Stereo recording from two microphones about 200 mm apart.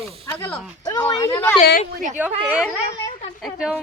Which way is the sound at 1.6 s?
40° left (ahead or behind).